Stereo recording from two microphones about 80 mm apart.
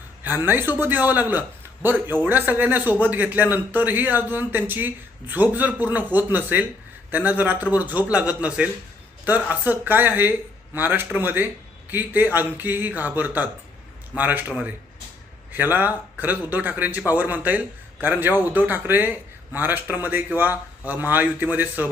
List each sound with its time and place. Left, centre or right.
0.3 s a man's voice: right
15.5 s a man's voice: right